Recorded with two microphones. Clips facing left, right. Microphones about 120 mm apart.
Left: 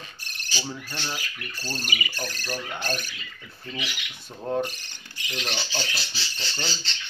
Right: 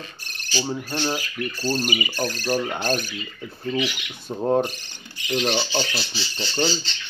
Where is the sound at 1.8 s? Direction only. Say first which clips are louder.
Right 7 dB; 20° right (ahead or behind).